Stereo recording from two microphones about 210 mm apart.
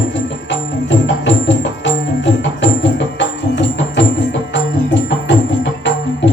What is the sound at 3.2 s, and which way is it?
Music, 60° left (ahead or behind).